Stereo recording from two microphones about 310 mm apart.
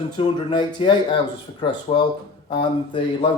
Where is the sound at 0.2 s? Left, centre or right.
Centre.